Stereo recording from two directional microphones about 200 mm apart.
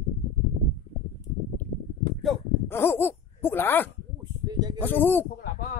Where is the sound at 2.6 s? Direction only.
10° left (ahead or behind).